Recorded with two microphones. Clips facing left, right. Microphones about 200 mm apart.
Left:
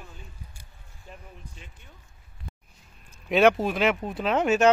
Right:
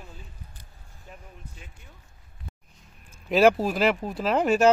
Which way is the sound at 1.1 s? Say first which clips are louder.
Left 1 dB; 5° right (ahead or behind).